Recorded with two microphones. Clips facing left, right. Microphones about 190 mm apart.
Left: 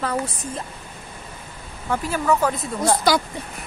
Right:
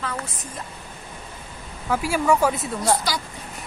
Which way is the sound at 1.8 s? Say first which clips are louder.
Right 1 dB; 10° right (ahead or behind).